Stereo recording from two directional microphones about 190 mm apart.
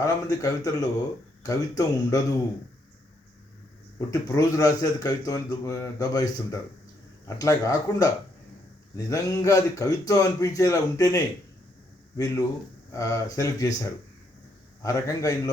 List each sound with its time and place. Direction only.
0.0 s a man's voice: 15° left (ahead or behind)
3.9 s a man's voice: 15° left (ahead or behind)
14.8 s a man's voice: 15° left (ahead or behind)